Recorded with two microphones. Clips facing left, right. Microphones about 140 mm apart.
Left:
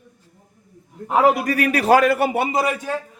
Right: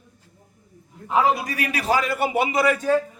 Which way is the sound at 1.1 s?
60° left (ahead or behind).